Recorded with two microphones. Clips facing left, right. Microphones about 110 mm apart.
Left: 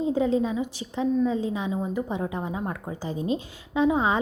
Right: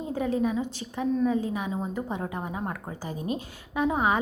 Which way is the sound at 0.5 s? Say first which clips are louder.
Left 2 dB; 15° left (ahead or behind).